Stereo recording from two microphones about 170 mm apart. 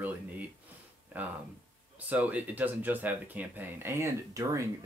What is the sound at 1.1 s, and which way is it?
Speech, 10° right (ahead or behind).